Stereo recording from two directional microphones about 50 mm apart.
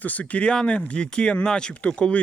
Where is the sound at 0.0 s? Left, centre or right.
Left.